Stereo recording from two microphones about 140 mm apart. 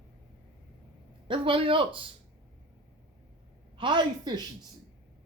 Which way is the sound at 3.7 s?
35° right (ahead or behind).